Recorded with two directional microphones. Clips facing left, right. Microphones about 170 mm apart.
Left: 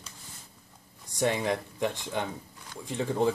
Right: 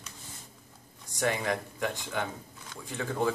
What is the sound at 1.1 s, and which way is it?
Speech, 25° left (ahead or behind).